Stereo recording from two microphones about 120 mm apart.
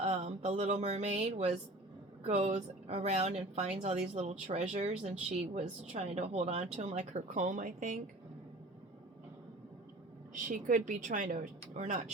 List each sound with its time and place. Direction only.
0.0 s speech: 65° right (ahead or behind); by 7.9 s 90° right
10.3 s a woman's voice: 90° right